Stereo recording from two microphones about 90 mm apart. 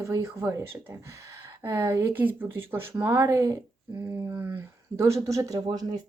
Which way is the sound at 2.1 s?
20° right (ahead or behind).